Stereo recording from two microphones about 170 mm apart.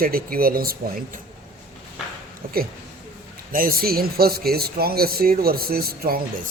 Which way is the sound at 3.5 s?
55° right (ahead or behind).